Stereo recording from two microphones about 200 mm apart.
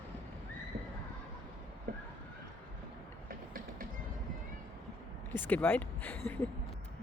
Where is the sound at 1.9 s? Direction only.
45° right (ahead or behind).